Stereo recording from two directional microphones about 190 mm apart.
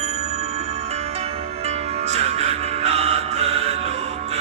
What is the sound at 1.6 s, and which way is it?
Music, 35° right (ahead or behind).